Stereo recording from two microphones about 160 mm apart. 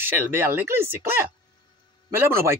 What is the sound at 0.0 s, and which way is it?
Speech, 15° right (ahead or behind).